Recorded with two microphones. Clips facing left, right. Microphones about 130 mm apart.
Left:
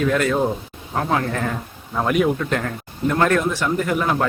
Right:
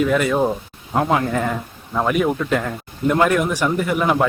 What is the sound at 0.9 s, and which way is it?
Speech, 20° right (ahead or behind).